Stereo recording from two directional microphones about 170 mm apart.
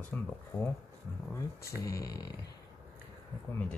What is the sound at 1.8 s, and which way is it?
Speech, 20° left (ahead or behind).